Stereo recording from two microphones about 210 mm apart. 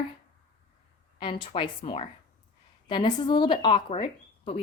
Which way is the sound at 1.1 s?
25° left (ahead or behind).